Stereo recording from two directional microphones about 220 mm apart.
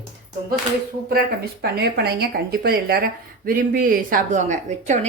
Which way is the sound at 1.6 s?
45° right (ahead or behind).